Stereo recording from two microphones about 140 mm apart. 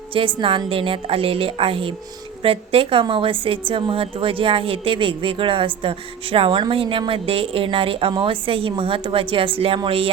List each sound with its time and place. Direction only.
0.1 s a woman's voice: 40° right (ahead or behind)